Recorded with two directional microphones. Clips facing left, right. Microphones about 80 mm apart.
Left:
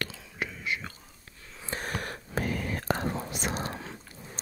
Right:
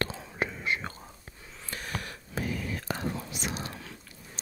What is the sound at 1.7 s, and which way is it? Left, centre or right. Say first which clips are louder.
Whispering: left 3 dB; left.